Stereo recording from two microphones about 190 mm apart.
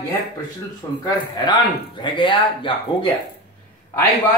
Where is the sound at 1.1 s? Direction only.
20° left (ahead or behind).